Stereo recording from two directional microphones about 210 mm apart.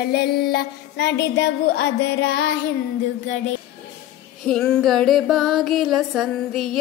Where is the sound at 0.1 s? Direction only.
50° left (ahead or behind).